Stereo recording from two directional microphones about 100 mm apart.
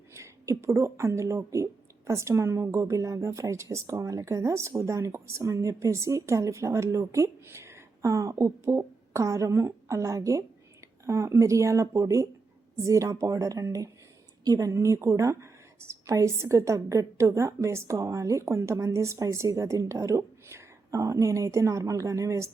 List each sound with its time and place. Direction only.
0.1 s a woman's voice: 30° right (ahead or behind)